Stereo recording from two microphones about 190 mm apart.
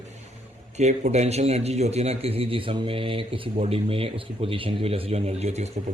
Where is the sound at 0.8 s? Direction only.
35° right (ahead or behind).